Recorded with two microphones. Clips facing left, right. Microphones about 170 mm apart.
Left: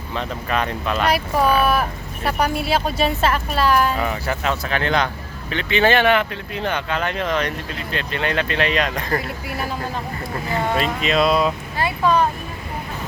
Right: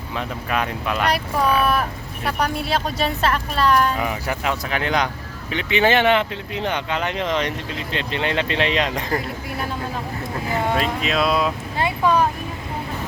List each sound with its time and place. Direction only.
0.1 s speech: 5° right (ahead or behind)
1.0 s speech: 5° left (ahead or behind)
3.9 s speech: 10° right (ahead or behind)
9.5 s speech: 5° left (ahead or behind)
11.8 s speech: 20° right (ahead or behind)